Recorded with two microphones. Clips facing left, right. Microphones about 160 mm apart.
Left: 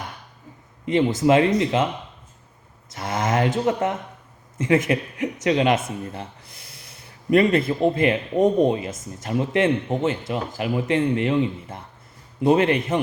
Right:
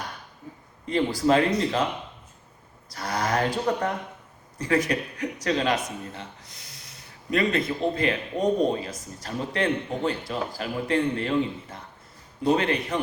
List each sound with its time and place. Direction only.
0.9 s speech: 20° left (ahead or behind)
2.9 s a sound: 25° left (ahead or behind)
4.5 s speech: 25° left (ahead or behind)